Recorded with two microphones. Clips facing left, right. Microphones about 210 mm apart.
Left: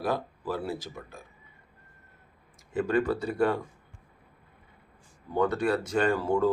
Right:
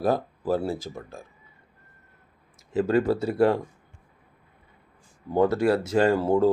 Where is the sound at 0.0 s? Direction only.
45° right (ahead or behind).